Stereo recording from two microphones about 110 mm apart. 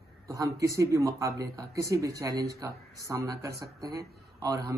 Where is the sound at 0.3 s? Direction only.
30° right (ahead or behind).